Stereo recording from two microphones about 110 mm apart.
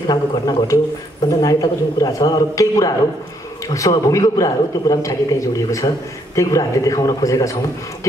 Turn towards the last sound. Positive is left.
turn(degrees=30)  # may be behind; listen again after turning